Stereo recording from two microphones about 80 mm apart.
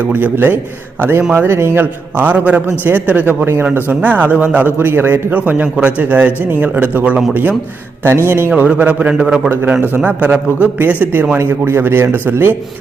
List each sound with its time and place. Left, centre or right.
0.1 s a man's voice: right
8.0 s a man's voice: right; by 9.2 s centre
9.2 s a man's voice: centre
9.5 s a man's voice: right